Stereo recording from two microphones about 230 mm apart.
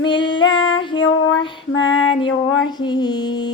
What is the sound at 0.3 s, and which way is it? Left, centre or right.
Female singing, left.